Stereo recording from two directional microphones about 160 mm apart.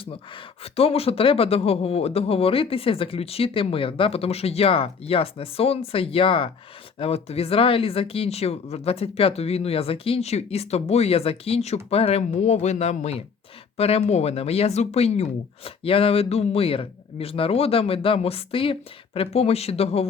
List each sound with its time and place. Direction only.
0.0 s speech: 35° left (ahead or behind)